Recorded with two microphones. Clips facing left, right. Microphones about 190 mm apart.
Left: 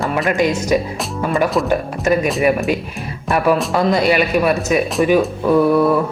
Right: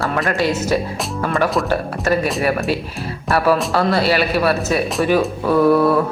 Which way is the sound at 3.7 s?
15° left (ahead or behind).